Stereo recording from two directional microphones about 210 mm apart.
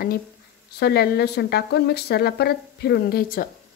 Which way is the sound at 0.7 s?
50° left (ahead or behind).